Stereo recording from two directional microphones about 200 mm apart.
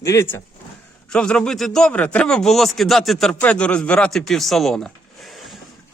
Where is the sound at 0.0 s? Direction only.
15° left (ahead or behind).